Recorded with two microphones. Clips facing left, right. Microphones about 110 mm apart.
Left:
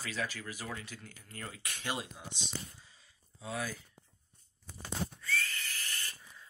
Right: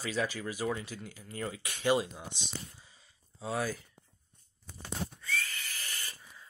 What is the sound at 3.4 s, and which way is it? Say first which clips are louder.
Speech: right 5 dB; 40° right (ahead or behind).